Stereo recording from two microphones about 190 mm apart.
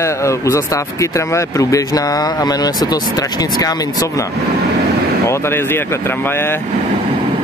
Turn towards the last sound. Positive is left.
turn(degrees=10)  # may be behind; listen again after turning